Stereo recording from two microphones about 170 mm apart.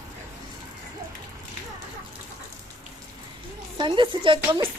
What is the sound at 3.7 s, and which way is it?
Speech, 30° right (ahead or behind).